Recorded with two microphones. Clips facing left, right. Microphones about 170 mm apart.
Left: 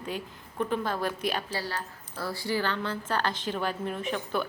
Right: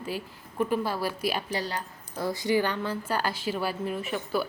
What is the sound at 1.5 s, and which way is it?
A woman's voice, 20° right (ahead or behind).